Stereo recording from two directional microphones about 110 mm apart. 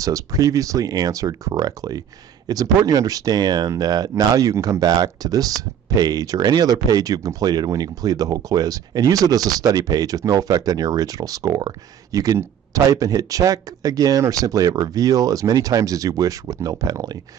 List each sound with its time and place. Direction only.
0.0 s speech: 30° right (ahead or behind)